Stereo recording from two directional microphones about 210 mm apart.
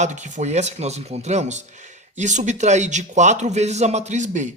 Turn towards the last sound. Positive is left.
turn(degrees=-35)  # may be behind; listen again after turning